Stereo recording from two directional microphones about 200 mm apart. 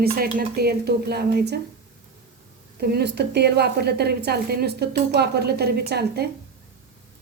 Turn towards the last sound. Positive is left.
turn(degrees=-55)  # may be behind; listen again after turning